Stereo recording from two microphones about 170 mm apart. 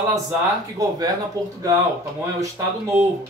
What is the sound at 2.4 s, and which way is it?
Speech, 15° right (ahead or behind).